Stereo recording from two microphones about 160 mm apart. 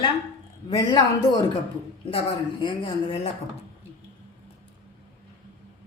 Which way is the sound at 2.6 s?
30° left (ahead or behind).